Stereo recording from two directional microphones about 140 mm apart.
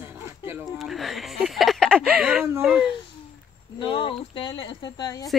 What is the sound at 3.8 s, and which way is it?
Speech, 35° left (ahead or behind).